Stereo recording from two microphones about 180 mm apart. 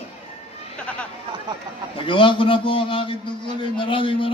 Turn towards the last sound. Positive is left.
turn(degrees=30)  # may be behind; listen again after turning